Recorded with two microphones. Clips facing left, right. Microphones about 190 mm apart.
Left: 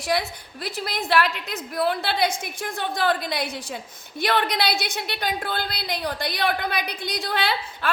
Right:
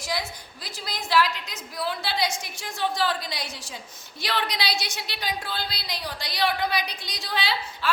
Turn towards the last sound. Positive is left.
turn(degrees=55)  # may be behind; listen again after turning